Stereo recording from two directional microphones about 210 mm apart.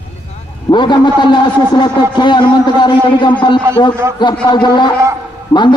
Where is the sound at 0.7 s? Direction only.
20° left (ahead or behind).